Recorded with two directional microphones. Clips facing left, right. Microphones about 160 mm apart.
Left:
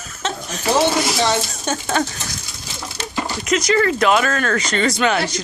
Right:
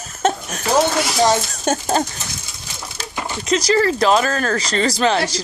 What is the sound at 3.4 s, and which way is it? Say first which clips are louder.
Speech: right 1 dB; 30° right (ahead or behind).